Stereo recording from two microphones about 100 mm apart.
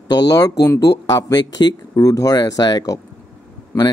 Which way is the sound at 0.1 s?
40° left (ahead or behind).